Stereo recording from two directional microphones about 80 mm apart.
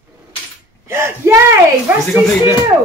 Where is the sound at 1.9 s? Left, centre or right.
Right.